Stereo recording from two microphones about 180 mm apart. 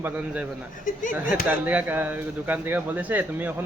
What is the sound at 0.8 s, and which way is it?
Speech, 45° left (ahead or behind).